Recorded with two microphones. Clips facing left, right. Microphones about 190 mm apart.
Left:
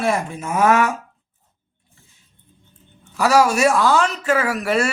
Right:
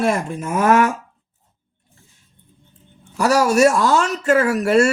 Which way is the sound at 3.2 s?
45° right (ahead or behind).